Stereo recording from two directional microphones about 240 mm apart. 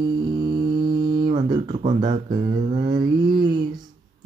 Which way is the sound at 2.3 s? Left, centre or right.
Right.